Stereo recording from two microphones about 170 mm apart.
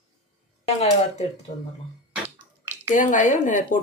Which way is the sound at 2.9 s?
50° left (ahead or behind).